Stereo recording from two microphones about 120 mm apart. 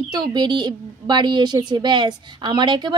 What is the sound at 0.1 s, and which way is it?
Speech, 35° right (ahead or behind).